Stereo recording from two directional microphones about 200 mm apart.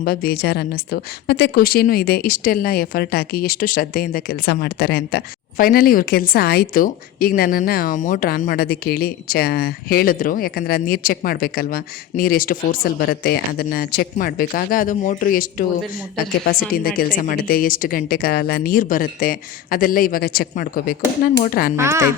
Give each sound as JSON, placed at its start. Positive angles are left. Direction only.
{"t": 0.0, "sound": "a woman's voice", "side_deg": 50}
{"t": 21.8, "sound": "a woman's voice", "side_deg": -15}